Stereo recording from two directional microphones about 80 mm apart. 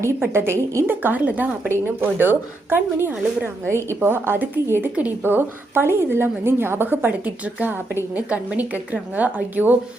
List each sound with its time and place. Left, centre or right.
0.0 s a woman's voice: right
0.9 s a woman's voice: right